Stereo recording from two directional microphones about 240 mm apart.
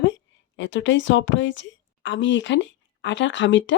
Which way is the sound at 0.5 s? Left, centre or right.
Left.